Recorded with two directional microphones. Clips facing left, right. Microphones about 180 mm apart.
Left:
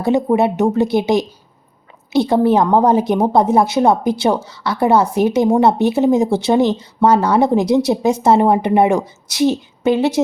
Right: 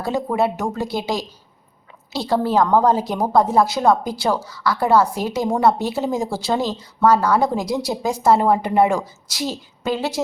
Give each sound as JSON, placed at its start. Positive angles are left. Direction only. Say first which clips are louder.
{"t": 0.0, "sound": "speech", "louder": "left 6 dB", "side_deg": 20}